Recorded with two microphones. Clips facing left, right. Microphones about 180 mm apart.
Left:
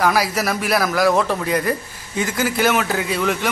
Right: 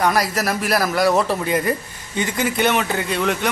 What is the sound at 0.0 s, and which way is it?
A man's voice, centre (ahead or behind).